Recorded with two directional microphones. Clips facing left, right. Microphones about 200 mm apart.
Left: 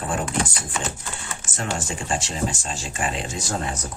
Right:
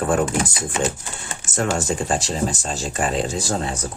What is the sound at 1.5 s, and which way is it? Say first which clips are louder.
Speech: right 7 dB; 45° right (ahead or behind).